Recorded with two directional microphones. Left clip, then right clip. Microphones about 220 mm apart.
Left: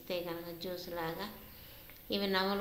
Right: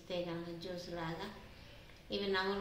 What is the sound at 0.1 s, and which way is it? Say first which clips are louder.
A woman's voice: left 2 dB; 45° left (ahead or behind).